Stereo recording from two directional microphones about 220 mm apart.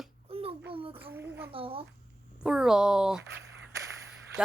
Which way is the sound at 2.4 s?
Centre (ahead or behind).